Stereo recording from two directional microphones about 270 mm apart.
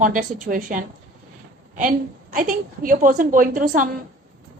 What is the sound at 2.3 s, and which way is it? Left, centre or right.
A woman's voice, right.